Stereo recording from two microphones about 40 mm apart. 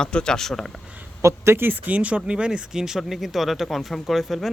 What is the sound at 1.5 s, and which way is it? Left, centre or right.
Speech, right.